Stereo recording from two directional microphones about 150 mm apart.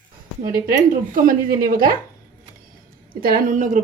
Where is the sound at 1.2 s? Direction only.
70° right (ahead or behind).